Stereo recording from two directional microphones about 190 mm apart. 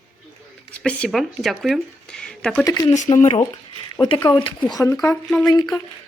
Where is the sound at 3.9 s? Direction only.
25° left (ahead or behind).